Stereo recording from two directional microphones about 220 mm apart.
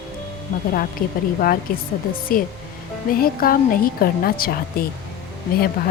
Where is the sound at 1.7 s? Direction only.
40° left (ahead or behind).